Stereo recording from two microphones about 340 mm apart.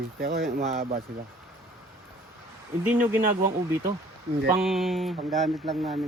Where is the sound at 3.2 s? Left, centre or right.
Right.